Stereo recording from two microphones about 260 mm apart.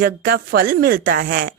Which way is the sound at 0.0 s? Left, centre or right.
Right.